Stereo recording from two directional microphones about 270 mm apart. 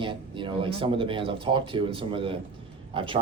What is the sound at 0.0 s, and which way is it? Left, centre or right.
Speech, centre.